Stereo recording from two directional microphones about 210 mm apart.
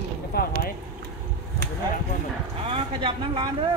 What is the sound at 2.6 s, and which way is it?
Speech, 25° right (ahead or behind).